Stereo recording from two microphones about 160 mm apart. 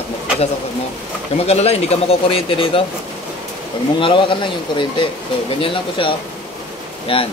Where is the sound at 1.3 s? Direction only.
40° left (ahead or behind).